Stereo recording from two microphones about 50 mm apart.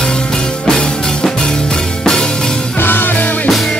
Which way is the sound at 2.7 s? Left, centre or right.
Left.